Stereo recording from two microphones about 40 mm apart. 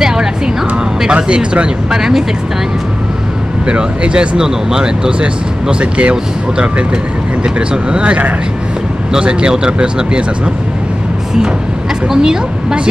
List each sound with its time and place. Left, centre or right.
0.0 s a sound: centre
1.0 s speech: right
1.9 s speech: centre
3.6 s speech: right
7.4 s speech: right
9.2 s speech: right
12.1 s speech: centre